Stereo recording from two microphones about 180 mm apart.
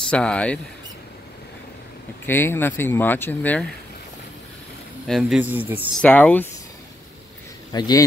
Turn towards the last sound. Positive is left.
turn(degrees=20)  # may be behind; listen again after turning